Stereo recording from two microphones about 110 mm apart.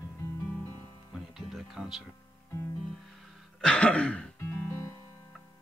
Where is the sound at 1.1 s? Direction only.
5° right (ahead or behind).